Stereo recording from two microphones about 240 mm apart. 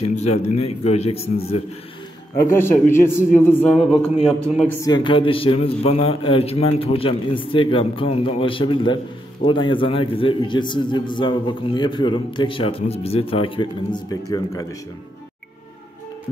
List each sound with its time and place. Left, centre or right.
0.0 s a man's voice: left
2.3 s a man's voice: centre